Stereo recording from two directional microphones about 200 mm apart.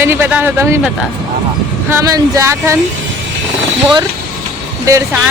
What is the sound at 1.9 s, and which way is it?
Speech, 15° right (ahead or behind).